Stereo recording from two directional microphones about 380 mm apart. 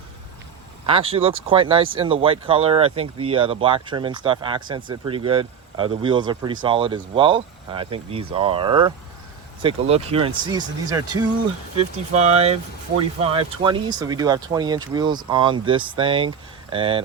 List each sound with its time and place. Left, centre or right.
0.9 s speech: centre